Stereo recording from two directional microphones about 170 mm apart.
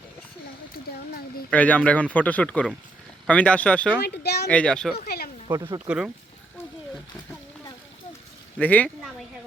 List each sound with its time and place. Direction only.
1.5 s speech: 10° left (ahead or behind)
4.0 s speech: 75° left (ahead or behind)
4.4 s a child's voice: 5° left (ahead or behind)
5.0 s a sound: 65° left (ahead or behind)
5.5 s speech: 20° right (ahead or behind)
8.5 s speech: 10° left (ahead or behind)